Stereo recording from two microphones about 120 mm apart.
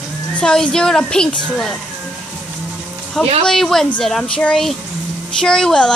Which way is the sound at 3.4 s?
5° left (ahead or behind).